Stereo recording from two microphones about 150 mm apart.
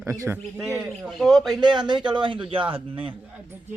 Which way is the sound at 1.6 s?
30° right (ahead or behind).